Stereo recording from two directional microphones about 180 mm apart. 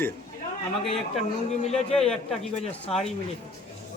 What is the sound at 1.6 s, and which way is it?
Speech, 35° left (ahead or behind).